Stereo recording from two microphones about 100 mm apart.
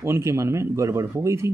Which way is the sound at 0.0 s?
30° right (ahead or behind).